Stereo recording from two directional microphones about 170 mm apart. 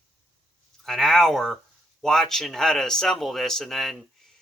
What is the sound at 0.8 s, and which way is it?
Speech, centre (ahead or behind).